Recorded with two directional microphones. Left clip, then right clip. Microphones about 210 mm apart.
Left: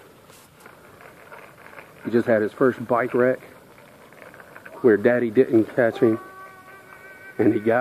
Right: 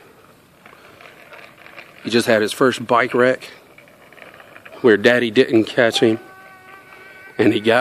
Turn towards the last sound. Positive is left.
turn(degrees=-50)  # may be behind; listen again after turning